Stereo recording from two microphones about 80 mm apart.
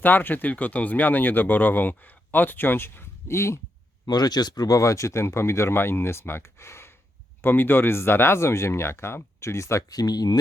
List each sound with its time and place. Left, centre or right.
0.0 s speech: left
4.0 s speech: left
9.9 s speech: left